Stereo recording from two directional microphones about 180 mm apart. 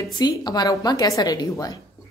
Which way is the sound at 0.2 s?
20° left (ahead or behind).